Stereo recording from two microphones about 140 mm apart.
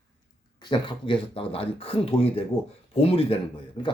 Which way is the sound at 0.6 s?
35° left (ahead or behind).